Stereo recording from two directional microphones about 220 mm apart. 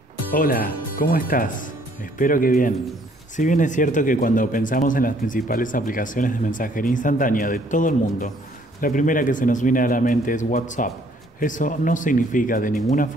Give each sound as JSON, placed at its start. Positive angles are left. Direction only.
{"t": 0.3, "sound": "speech", "side_deg": 40}